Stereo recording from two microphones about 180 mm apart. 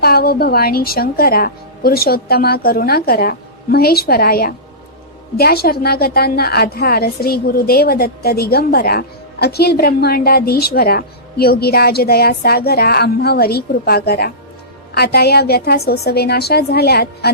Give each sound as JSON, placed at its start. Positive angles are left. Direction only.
{"t": 0.0, "sound": "a woman's voice", "side_deg": 60}